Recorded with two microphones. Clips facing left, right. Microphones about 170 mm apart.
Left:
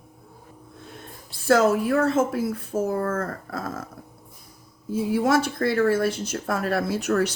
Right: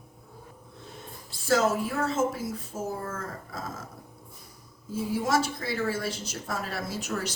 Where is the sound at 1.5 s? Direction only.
65° left (ahead or behind).